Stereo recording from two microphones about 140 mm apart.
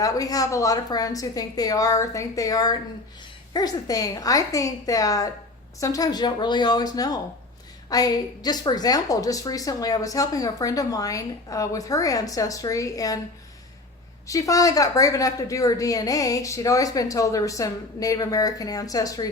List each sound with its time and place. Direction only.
0.0 s a woman's voice: 25° left (ahead or behind)
14.3 s a woman's voice: 25° left (ahead or behind)